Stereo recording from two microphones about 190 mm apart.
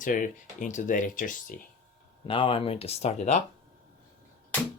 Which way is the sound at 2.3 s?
30° left (ahead or behind).